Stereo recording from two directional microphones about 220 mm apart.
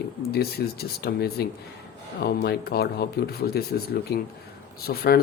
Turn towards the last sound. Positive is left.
turn(degrees=45)  # may be behind; listen again after turning